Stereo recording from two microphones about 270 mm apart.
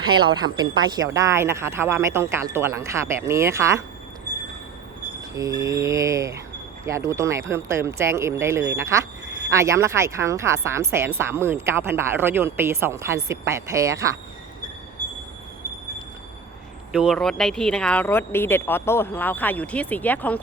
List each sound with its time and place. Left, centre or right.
0.1 s speech: centre
5.3 s speech: centre
16.9 s speech: centre